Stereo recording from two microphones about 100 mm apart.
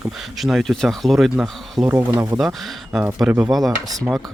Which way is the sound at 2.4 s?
5° right (ahead or behind).